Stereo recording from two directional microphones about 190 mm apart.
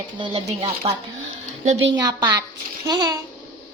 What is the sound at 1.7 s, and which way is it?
Speech, 90° right.